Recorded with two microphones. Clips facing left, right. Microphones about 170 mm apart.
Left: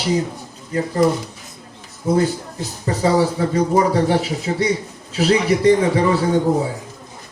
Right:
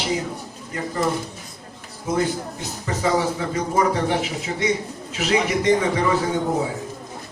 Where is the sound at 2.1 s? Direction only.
35° left (ahead or behind).